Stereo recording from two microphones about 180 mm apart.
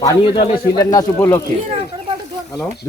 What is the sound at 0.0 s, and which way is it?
Speech, 25° left (ahead or behind).